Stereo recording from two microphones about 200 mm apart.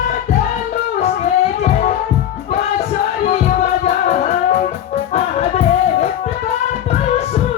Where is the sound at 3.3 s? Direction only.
35° left (ahead or behind).